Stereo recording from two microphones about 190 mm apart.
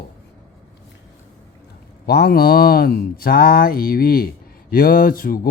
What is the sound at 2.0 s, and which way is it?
Speech, 55° left (ahead or behind).